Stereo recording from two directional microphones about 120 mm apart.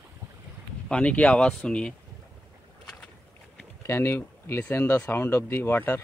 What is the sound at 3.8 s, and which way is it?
Speech, 20° left (ahead or behind).